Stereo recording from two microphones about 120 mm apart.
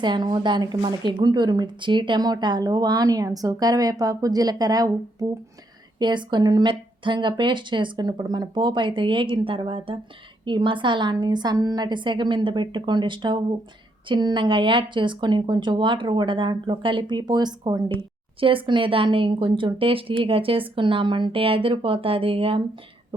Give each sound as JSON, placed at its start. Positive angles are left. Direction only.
{"t": 0.0, "sound": "a woman's voice", "side_deg": -40}
{"t": 6.0, "sound": "a woman's voice", "side_deg": -40}